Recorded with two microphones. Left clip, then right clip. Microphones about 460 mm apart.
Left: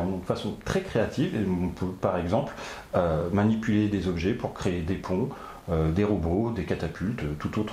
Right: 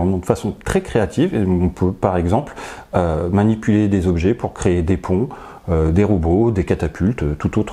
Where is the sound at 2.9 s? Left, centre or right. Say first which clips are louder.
Right 7 dB; right.